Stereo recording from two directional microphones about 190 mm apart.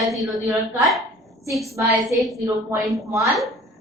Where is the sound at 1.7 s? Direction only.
15° right (ahead or behind).